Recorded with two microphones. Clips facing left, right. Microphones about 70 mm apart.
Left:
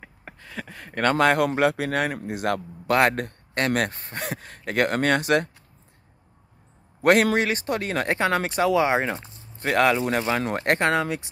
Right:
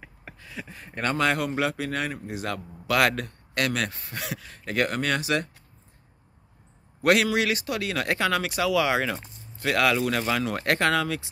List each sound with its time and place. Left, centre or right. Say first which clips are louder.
0.0 s speech: left 2 dB; left
2.9 s speech: left 3 dB; left
7.0 s speech: left 3 dB; left